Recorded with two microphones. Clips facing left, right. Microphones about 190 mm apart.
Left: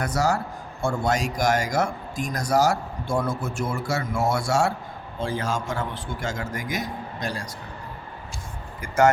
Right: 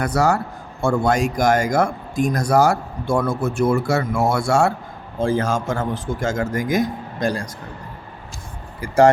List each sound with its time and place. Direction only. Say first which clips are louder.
0.0 s a man's voice: right 5 dB; 60° right (ahead or behind)
8.8 s speech: right 5 dB; 35° right (ahead or behind)